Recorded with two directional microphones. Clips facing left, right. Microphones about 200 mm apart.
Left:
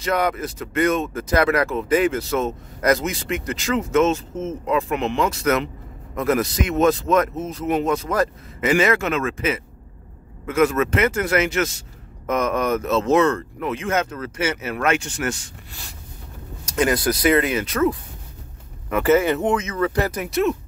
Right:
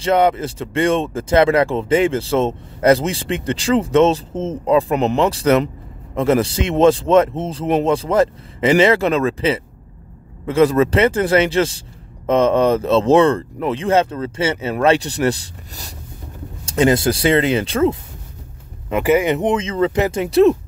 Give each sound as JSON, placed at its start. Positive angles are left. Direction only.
{"t": 0.0, "sound": "speech", "side_deg": -25}
{"t": 18.9, "sound": "speech", "side_deg": -15}